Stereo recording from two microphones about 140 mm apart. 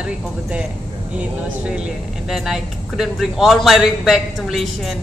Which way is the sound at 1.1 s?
10° right (ahead or behind).